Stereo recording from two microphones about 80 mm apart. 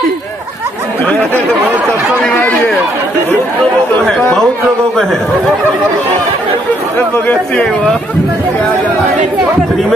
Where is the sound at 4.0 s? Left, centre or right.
Centre.